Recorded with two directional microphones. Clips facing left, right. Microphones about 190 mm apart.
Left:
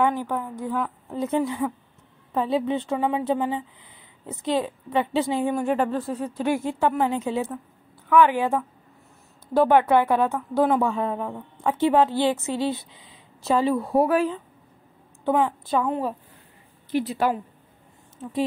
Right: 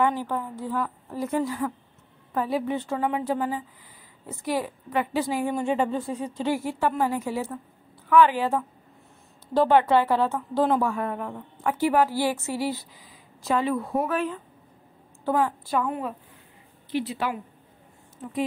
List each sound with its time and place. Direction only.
0.2 s a woman's voice: 15° left (ahead or behind)
5.6 s speech: centre (ahead or behind)
6.3 s a woman's voice: 15° left (ahead or behind)
10.8 s a woman's voice: 20° left (ahead or behind)
15.2 s a woman's voice: 20° left (ahead or behind)
16.9 s speech: 45° left (ahead or behind)